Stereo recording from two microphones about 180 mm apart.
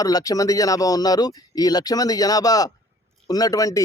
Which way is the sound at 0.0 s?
20° left (ahead or behind).